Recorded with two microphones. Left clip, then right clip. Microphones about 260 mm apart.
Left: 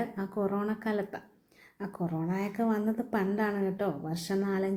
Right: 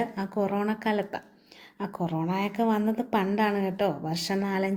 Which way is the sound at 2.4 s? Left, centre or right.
Centre.